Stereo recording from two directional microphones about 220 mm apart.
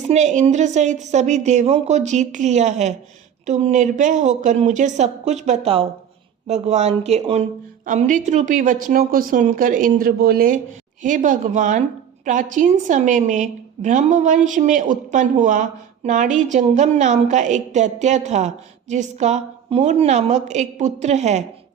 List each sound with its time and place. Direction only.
0.1 s a woman's voice: 35° right (ahead or behind)